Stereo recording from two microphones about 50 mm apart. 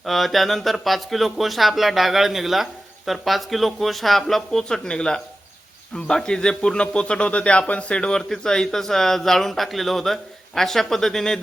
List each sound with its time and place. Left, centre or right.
0.0 s speech: centre